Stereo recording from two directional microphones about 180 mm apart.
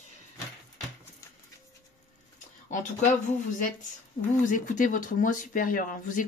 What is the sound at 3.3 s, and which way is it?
Speech, 45° left (ahead or behind).